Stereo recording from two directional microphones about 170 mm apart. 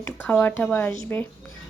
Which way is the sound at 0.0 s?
10° left (ahead or behind).